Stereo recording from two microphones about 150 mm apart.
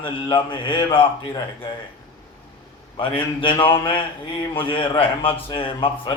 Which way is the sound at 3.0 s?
35° left (ahead or behind).